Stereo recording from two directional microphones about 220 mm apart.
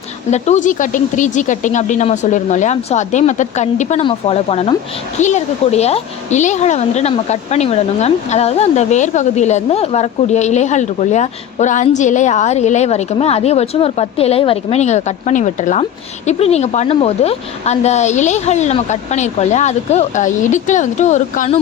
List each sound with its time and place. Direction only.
0.3 s a woman's voice: 30° left (ahead or behind)